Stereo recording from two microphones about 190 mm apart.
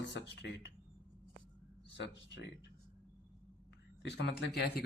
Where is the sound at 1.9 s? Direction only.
70° left (ahead or behind).